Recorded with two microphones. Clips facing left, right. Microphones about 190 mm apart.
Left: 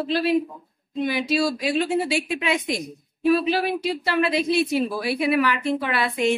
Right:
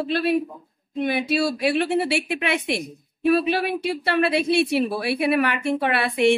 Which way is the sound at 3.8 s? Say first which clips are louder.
Right 1 dB; 65° right (ahead or behind).